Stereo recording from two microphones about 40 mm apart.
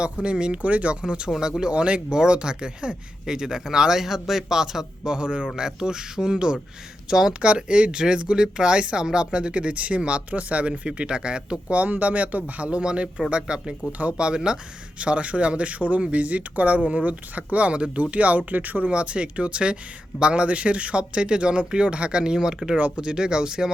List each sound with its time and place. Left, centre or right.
0.0 s speech: right
1.0 s speech: right
1.7 s speech: right
7.4 s speech: right
11.8 s speech: right
18.9 s speech: right